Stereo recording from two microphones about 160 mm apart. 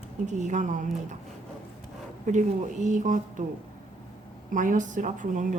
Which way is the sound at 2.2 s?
50° right (ahead or behind).